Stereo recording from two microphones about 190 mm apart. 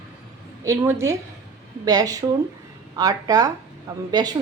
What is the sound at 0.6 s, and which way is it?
A woman's voice, 15° right (ahead or behind).